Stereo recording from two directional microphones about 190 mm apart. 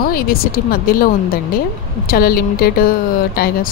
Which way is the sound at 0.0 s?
50° left (ahead or behind).